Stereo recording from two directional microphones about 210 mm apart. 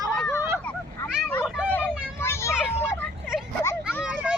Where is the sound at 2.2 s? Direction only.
10° left (ahead or behind).